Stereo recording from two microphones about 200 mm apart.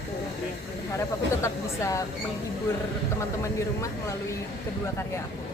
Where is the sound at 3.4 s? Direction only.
15° left (ahead or behind).